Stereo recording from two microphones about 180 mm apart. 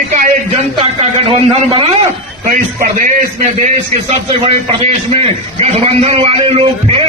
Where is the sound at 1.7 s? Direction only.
30° right (ahead or behind).